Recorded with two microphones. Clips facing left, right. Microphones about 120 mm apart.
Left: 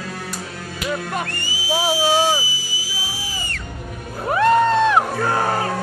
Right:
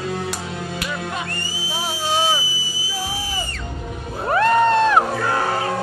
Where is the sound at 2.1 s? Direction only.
5° left (ahead or behind).